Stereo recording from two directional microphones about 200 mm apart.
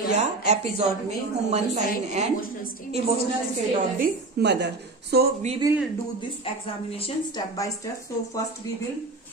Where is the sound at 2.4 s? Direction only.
45° left (ahead or behind).